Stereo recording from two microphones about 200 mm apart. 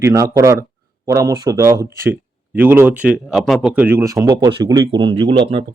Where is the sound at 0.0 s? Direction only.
15° right (ahead or behind).